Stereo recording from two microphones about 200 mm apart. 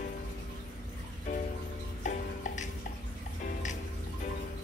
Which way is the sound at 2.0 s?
40° left (ahead or behind).